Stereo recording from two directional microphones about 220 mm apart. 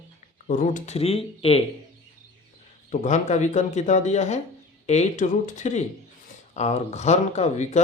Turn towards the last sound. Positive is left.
turn(degrees=30)  # may be behind; listen again after turning